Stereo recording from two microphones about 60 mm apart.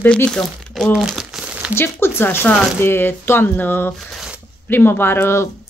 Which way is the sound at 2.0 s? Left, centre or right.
Left.